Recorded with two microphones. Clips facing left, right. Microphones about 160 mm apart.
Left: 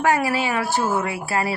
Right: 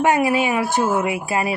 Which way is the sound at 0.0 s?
20° right (ahead or behind).